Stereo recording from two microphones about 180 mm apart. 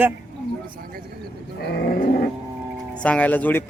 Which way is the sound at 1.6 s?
65° left (ahead or behind).